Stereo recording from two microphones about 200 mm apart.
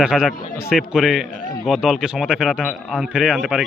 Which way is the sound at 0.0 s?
Centre (ahead or behind).